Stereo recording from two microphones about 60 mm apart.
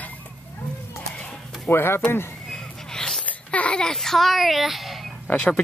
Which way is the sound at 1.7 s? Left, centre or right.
Left.